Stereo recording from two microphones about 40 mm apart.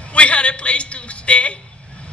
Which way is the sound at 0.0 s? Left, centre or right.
Left.